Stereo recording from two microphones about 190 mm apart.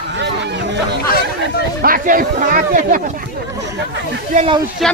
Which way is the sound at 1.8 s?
50° right (ahead or behind).